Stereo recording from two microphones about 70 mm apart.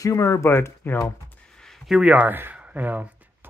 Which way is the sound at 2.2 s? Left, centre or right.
Right.